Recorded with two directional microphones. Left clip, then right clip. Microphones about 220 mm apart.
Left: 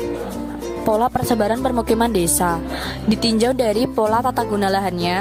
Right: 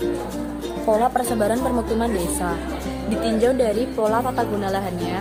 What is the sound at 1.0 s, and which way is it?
Speech, 45° left (ahead or behind).